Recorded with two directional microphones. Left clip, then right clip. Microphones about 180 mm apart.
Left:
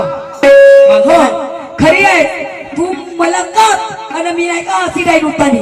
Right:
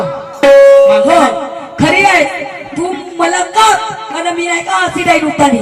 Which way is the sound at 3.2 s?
15° right (ahead or behind).